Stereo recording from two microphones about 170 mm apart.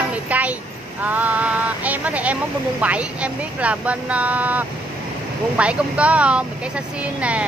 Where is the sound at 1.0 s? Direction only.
10° right (ahead or behind).